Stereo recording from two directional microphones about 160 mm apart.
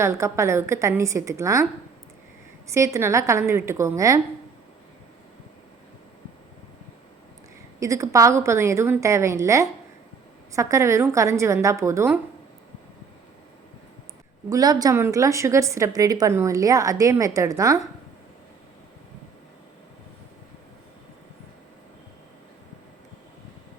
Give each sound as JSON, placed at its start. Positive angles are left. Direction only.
{"t": 0.0, "sound": "a woman's voice", "side_deg": -15}
{"t": 2.7, "sound": "a woman's voice", "side_deg": -20}
{"t": 7.8, "sound": "a woman's voice", "side_deg": -20}
{"t": 14.5, "sound": "a woman's voice", "side_deg": -25}